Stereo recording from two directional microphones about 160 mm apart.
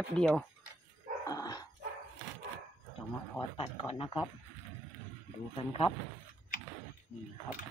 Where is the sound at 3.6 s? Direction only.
35° left (ahead or behind).